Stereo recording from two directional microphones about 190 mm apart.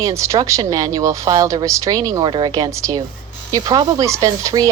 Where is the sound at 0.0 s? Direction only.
15° right (ahead or behind).